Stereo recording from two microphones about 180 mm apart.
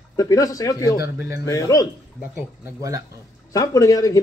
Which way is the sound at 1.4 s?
20° left (ahead or behind).